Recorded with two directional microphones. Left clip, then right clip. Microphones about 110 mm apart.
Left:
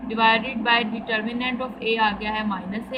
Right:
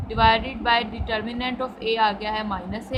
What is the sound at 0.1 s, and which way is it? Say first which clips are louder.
A woman's voice: even; 35° right (ahead or behind).